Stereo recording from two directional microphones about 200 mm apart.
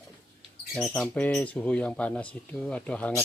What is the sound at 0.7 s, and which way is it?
Speech, centre (ahead or behind).